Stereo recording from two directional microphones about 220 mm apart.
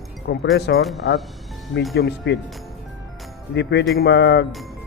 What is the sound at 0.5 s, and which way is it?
Speech, 50° left (ahead or behind).